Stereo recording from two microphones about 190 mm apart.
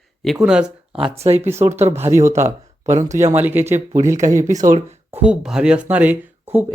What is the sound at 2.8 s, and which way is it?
Speech, 35° right (ahead or behind).